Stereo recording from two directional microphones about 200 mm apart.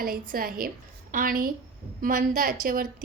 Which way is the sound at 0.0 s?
45° right (ahead or behind).